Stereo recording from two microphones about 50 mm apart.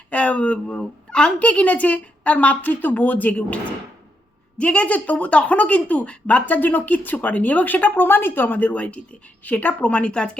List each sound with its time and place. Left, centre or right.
0.1 s a woman's voice: left